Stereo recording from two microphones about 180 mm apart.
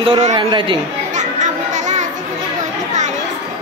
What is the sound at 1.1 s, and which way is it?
Children playing, 40° right (ahead or behind).